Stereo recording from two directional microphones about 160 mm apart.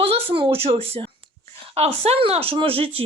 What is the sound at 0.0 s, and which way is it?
A woman's voice, 35° right (ahead or behind).